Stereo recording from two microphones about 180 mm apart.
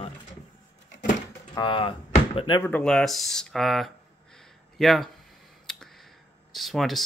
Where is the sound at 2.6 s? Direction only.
5° left (ahead or behind).